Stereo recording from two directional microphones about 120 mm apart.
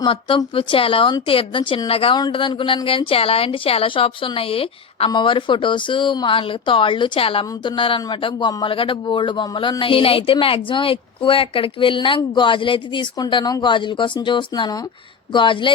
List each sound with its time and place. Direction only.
0.0 s a woman's voice: 40° left (ahead or behind)
2.1 s a woman's voice: 40° left (ahead or behind)